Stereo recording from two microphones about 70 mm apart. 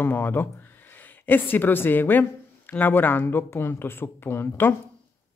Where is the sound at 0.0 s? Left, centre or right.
Left.